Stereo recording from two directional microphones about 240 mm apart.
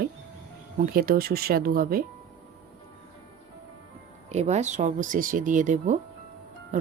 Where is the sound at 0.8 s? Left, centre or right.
Right.